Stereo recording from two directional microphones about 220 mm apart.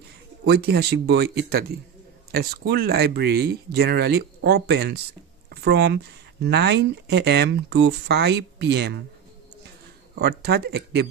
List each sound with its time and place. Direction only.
0.5 s speech: 50° right (ahead or behind)
10.1 s speech: 50° right (ahead or behind)